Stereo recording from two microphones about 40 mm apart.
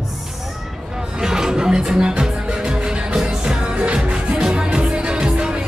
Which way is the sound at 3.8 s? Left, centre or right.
Right.